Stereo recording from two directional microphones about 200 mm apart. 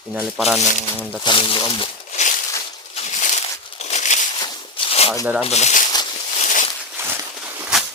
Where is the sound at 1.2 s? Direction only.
25° left (ahead or behind).